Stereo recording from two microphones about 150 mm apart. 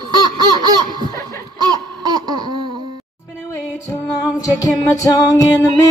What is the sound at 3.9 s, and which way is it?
Music, 20° left (ahead or behind).